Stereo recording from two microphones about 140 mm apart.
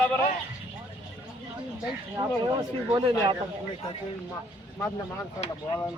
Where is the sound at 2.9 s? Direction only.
35° right (ahead or behind).